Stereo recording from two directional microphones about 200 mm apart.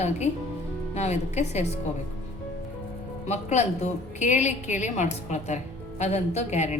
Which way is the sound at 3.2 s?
35° left (ahead or behind).